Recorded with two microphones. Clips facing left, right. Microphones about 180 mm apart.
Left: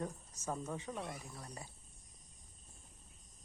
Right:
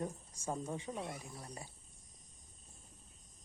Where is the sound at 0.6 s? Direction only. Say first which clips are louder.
Right 1 dB; 30° right (ahead or behind).